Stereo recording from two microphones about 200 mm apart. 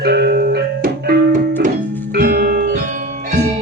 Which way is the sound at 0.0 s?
55° right (ahead or behind).